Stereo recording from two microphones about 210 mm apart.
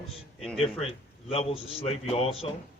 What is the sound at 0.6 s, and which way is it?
A man's voice, 30° left (ahead or behind).